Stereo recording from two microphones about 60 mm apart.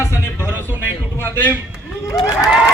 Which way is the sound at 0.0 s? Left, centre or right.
Left.